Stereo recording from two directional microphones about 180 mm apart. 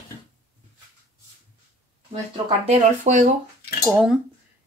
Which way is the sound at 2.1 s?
35° right (ahead or behind).